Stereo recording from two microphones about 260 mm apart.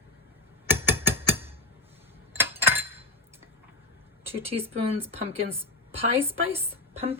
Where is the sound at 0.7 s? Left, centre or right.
Centre.